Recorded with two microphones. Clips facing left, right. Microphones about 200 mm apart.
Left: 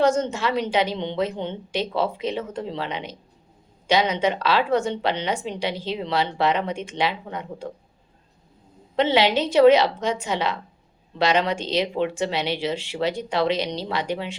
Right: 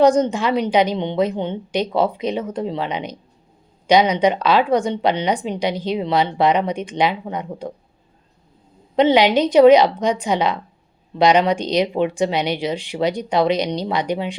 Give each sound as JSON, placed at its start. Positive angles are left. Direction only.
{"t": 0.0, "sound": "a woman's voice", "side_deg": -15}
{"t": 9.0, "sound": "a woman's voice", "side_deg": -15}